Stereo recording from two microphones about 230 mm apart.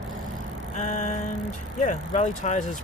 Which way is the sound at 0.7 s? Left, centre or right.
Left.